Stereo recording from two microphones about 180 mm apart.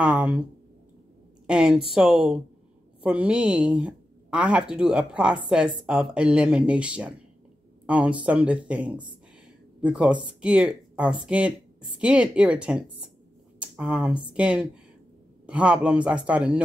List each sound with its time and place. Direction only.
0.0 s speech: 5° right (ahead or behind)
1.5 s a man's voice: 5° right (ahead or behind)